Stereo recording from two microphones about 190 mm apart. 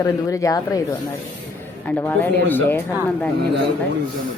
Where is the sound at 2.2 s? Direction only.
10° left (ahead or behind).